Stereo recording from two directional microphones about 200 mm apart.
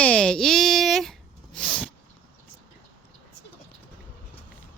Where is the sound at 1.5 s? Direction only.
5° left (ahead or behind).